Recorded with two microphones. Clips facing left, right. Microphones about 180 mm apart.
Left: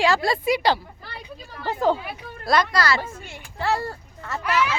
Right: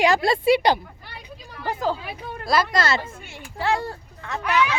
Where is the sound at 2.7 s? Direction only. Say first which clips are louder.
Even; 25° right (ahead or behind).